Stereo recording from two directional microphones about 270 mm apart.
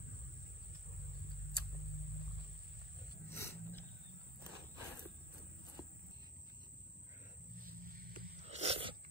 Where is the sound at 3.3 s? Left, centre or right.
Centre.